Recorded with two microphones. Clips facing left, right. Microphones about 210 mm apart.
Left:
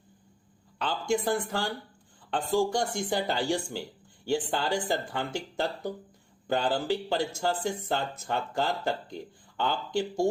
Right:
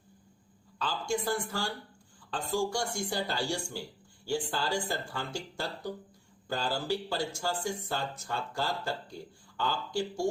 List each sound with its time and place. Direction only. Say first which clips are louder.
0.8 s speech: left 4 dB; 20° left (ahead or behind)